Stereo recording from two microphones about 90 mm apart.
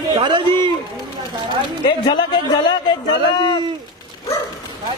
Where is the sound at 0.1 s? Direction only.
60° right (ahead or behind).